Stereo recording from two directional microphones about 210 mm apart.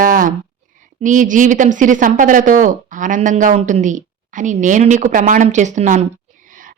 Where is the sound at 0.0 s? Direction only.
40° right (ahead or behind).